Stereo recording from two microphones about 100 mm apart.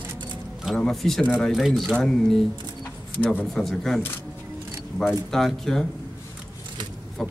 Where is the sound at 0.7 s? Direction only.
5° left (ahead or behind).